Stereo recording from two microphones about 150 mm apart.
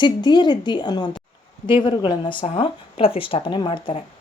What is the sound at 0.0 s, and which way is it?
A woman's voice, 30° left (ahead or behind).